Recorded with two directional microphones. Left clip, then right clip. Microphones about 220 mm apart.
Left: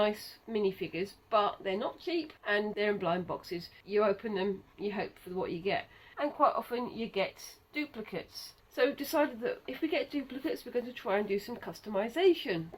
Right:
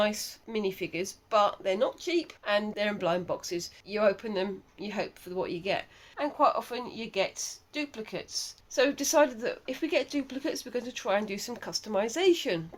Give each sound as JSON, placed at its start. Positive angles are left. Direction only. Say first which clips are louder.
{"t": 0.5, "sound": "speech", "louder": "right 1 dB", "side_deg": -50}